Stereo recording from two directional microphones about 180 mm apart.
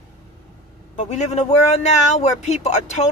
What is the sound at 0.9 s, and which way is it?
A man's voice, 40° left (ahead or behind).